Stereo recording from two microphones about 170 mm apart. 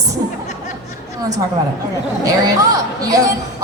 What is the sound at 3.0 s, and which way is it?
Speech, 20° right (ahead or behind).